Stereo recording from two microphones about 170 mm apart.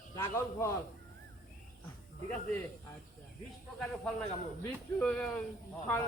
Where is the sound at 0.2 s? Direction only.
15° left (ahead or behind).